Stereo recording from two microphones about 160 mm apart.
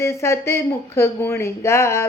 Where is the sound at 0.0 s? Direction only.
15° left (ahead or behind).